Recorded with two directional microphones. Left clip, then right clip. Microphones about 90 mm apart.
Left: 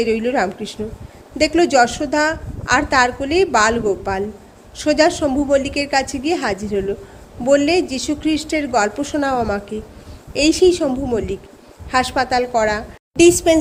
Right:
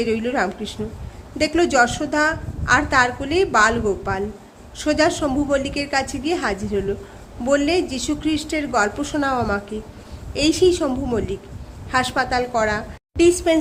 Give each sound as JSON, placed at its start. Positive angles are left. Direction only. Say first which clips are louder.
{"t": 0.0, "sound": "a woman's voice", "louder": "left 3 dB", "side_deg": 30}
{"t": 2.1, "sound": "a woman's voice", "louder": "left 2 dB", "side_deg": 40}
{"t": 10.8, "sound": "a woman's voice", "louder": "left 3 dB", "side_deg": 15}
{"t": 11.9, "sound": "a woman's voice", "louder": "left 3 dB", "side_deg": 40}